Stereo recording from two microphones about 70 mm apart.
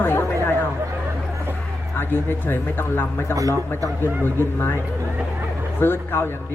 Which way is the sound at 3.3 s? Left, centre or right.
Right.